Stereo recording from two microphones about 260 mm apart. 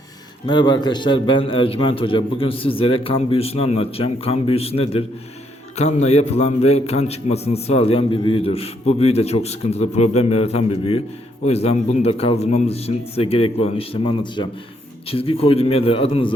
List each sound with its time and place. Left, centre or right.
0.4 s a man's voice: centre